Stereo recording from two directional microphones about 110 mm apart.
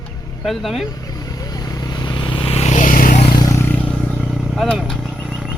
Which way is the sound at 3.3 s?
35° left (ahead or behind).